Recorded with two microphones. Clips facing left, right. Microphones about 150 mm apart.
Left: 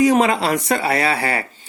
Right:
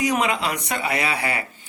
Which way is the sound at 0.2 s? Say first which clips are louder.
Left 6 dB; 40° left (ahead or behind).